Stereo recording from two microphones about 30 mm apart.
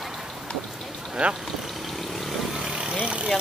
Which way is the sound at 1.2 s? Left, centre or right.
Right.